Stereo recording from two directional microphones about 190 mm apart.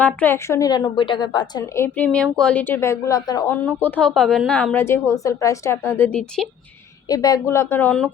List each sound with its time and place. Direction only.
0.0 s a woman's voice: 10° left (ahead or behind)
7.1 s a woman's voice: 20° left (ahead or behind)